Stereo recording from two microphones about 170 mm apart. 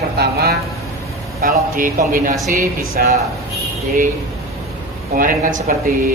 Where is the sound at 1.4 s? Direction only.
55° right (ahead or behind).